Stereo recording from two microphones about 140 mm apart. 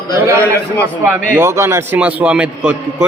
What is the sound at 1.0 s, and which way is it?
A man's voice, 15° right (ahead or behind).